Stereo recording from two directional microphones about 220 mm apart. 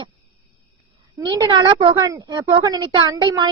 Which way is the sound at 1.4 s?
15° right (ahead or behind).